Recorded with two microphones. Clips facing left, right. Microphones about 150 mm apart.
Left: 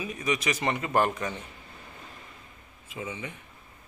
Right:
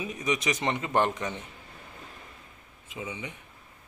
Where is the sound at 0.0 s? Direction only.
20° right (ahead or behind).